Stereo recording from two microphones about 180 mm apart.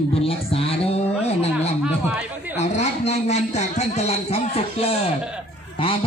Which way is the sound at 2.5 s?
40° left (ahead or behind).